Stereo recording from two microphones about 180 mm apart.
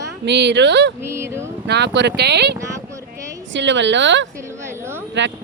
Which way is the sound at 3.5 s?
90° right.